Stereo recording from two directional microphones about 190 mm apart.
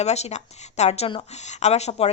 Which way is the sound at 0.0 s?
35° left (ahead or behind).